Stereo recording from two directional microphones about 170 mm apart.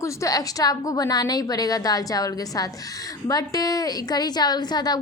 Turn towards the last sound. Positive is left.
turn(degrees=25)  # may be behind; listen again after turning